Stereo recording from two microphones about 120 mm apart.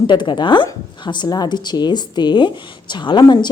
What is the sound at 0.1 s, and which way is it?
Speech, 40° left (ahead or behind).